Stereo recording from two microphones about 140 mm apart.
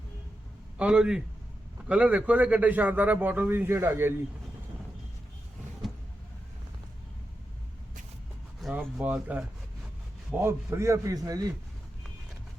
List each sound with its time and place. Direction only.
0.8 s a man's voice: 5° right (ahead or behind)
8.6 s a sound: centre (ahead or behind)
9.0 s a man's voice: 10° right (ahead or behind)